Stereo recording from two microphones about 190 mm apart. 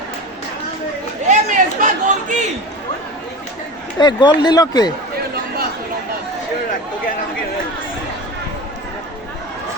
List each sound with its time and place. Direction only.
1.3 s chatter: 40° right (ahead or behind)
3.9 s speech: 20° left (ahead or behind)